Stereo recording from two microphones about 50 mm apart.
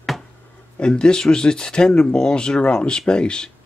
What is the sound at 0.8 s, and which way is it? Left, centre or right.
Speech, centre.